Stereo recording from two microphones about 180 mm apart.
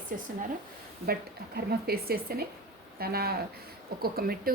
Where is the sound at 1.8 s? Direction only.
60° right (ahead or behind).